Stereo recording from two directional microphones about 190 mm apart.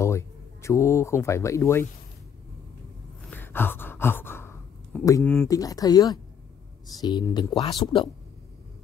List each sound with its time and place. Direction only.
0.0 s speech: 15° left (ahead or behind)
3.3 s gasp: 10° left (ahead or behind)
7.0 s speech: 20° left (ahead or behind)